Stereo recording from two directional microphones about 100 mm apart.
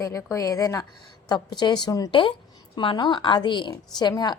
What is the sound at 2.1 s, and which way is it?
A woman's voice, 55° left (ahead or behind).